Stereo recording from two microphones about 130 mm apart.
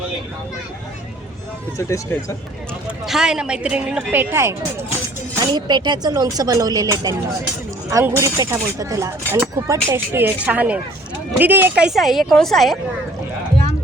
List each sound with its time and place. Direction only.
1.8 s speech: 20° left (ahead or behind)
3.1 s a woman's voice: 5° right (ahead or behind)
5.0 s speech: 30° right (ahead or behind); by 12.8 s centre (ahead or behind)